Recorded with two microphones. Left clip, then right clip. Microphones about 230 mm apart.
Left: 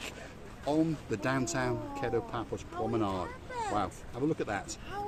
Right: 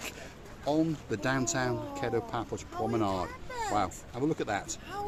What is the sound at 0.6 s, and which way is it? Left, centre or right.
Speech, centre.